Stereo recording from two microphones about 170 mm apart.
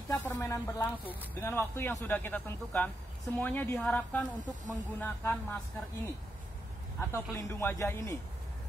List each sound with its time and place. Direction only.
0.1 s speech: 15° left (ahead or behind)
4.4 s speech: 50° right (ahead or behind)
4.9 s speech: 10° left (ahead or behind)
7.0 s speech: 15° left (ahead or behind)